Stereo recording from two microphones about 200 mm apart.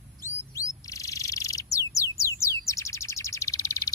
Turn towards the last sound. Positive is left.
turn(degrees=15)  # may be behind; listen again after turning